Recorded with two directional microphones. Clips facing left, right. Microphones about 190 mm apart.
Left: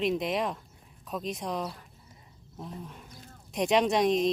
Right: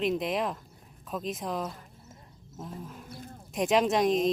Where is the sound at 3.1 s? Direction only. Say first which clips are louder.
Right 7 dB; 40° right (ahead or behind).